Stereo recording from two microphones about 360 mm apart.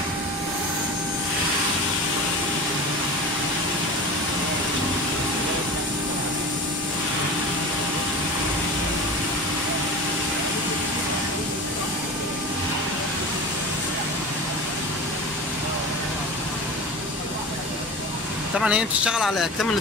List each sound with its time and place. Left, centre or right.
18.6 s speech: centre